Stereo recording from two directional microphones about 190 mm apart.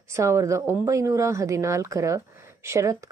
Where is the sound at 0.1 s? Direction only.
15° right (ahead or behind).